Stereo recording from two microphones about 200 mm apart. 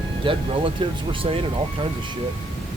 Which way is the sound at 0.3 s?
25° right (ahead or behind).